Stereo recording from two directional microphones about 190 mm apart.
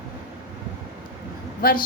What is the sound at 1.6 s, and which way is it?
Speech, 50° left (ahead or behind).